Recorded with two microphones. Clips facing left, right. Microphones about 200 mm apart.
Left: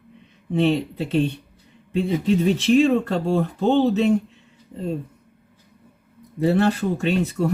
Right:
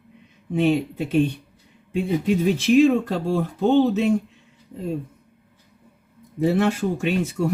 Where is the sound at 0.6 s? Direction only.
15° right (ahead or behind).